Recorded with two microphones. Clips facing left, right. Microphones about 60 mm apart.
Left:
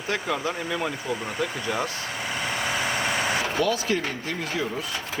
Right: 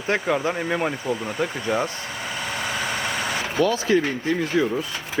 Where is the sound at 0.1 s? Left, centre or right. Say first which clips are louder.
Right 5 dB; right.